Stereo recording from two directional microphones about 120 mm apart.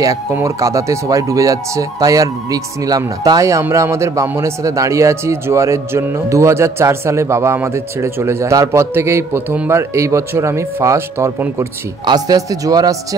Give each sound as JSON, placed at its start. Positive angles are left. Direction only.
{"t": 0.0, "sound": "speech", "side_deg": -25}
{"t": 12.1, "sound": "a man's voice", "side_deg": -30}